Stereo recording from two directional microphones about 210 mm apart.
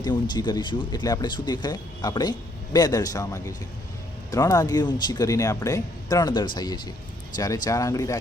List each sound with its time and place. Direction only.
0.0 s speech: 20° left (ahead or behind)